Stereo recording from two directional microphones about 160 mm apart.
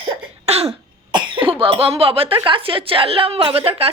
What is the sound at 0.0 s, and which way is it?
Cough, 40° right (ahead or behind).